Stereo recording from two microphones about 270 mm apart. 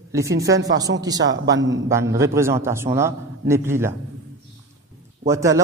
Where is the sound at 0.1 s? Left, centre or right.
Centre.